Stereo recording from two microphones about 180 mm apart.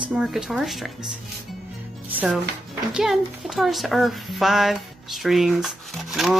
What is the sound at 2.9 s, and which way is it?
Speech, centre (ahead or behind).